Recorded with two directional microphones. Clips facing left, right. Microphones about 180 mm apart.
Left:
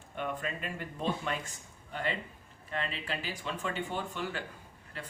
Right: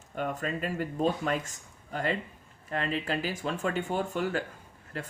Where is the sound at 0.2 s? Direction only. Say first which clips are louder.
Right 4 dB; 40° right (ahead or behind).